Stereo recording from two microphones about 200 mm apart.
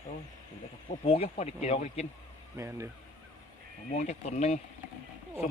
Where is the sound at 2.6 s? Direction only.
15° right (ahead or behind).